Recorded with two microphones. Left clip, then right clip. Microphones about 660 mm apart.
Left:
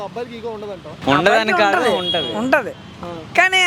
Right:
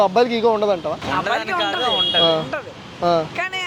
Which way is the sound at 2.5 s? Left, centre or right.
Left.